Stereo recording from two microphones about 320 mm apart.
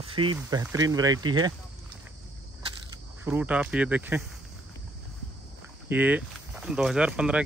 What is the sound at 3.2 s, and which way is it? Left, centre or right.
Speech, centre.